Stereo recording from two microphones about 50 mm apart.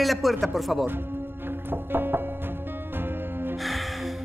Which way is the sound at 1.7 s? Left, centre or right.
Right.